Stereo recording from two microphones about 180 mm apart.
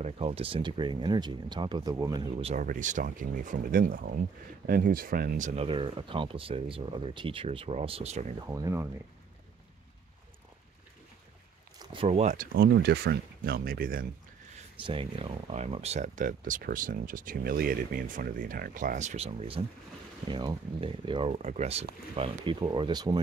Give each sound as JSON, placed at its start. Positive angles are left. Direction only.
{"t": 0.0, "sound": "speech", "side_deg": -35}
{"t": 2.4, "sound": "speech", "side_deg": -45}
{"t": 5.6, "sound": "speech", "side_deg": -30}
{"t": 8.4, "sound": "speech", "side_deg": -20}
{"t": 11.8, "sound": "speech", "side_deg": -30}
{"t": 12.5, "sound": "speech", "side_deg": -65}
{"t": 14.8, "sound": "speech", "side_deg": -30}